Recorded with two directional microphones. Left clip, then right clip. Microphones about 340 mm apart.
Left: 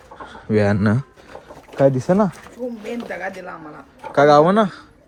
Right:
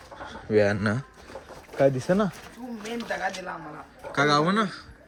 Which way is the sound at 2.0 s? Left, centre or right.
Left.